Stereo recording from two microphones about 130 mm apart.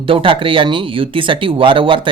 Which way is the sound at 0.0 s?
45° right (ahead or behind).